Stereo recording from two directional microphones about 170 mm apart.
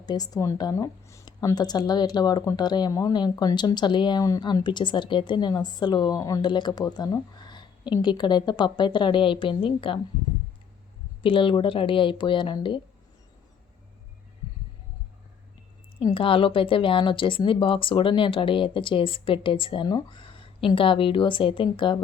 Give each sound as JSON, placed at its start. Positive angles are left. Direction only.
{"t": 0.0, "sound": "speech", "side_deg": 25}
{"t": 11.2, "sound": "speech", "side_deg": 30}
{"t": 16.0, "sound": "speech", "side_deg": 30}